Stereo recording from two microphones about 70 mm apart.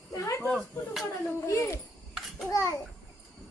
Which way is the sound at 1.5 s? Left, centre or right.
Left.